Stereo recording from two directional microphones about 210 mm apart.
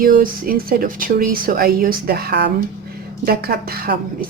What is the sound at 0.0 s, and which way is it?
Speech, 40° right (ahead or behind).